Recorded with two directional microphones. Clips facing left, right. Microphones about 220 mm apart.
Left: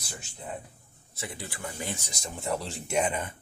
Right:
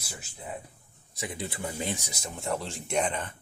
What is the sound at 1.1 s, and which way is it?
Speech, 15° right (ahead or behind).